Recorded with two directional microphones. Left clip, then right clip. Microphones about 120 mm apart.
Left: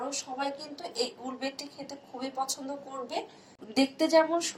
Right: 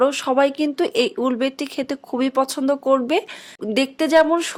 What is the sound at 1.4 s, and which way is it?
A woman's voice, 45° right (ahead or behind).